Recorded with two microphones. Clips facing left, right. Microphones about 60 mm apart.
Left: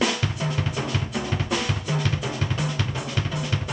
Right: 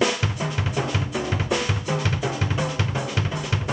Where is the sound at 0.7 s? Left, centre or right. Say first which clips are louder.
Right 2 dB; centre.